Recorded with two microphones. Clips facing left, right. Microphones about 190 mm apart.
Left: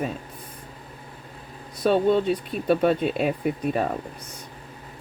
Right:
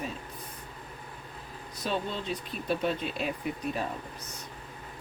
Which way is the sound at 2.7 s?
55° left (ahead or behind).